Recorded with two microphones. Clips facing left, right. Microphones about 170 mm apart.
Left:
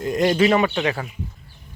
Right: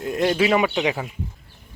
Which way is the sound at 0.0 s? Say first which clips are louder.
Left 2 dB; centre (ahead or behind).